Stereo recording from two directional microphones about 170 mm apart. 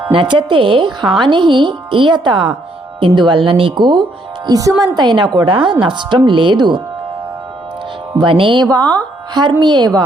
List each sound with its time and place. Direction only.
0.1 s a woman's voice: 30° right (ahead or behind)
8.2 s a woman's voice: 30° right (ahead or behind)